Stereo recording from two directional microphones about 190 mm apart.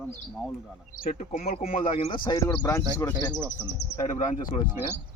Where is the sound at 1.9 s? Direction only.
25° left (ahead or behind).